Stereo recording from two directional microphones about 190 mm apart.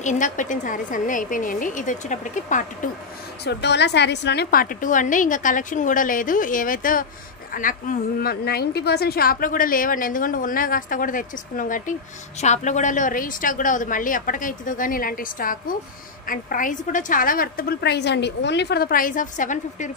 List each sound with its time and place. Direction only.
0.0 s a woman's voice: 40° left (ahead or behind)
3.4 s a woman's voice: 65° left (ahead or behind); by 19.9 s 40° left (ahead or behind)